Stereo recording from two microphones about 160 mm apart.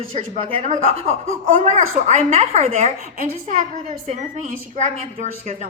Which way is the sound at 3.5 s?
55° right (ahead or behind).